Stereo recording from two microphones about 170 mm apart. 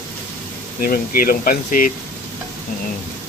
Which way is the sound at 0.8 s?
55° left (ahead or behind).